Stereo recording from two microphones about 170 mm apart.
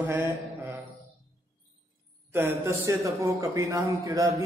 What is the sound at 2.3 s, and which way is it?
A man's voice, 15° right (ahead or behind).